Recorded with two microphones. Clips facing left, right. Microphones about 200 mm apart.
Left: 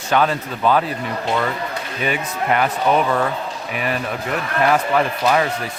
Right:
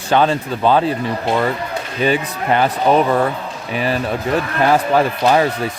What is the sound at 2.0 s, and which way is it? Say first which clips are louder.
Speech: right 3 dB; 30° right (ahead or behind).